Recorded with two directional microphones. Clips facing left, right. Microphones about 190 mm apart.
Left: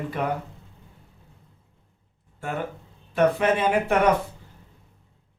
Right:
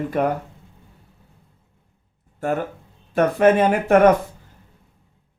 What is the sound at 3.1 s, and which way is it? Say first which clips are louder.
Speech: right 5 dB; 50° right (ahead or behind).